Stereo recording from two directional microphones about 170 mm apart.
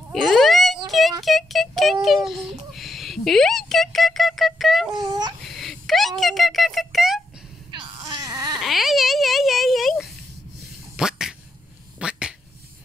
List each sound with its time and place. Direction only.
0.1 s a sound: centre (ahead or behind)
0.8 s child singing: centre (ahead or behind)
1.2 s a child's voice: centre (ahead or behind)
7.7 s baby cry: 25° right (ahead or behind)
8.5 s a child's voice: centre (ahead or behind)
11.0 s a sound: 5° right (ahead or behind)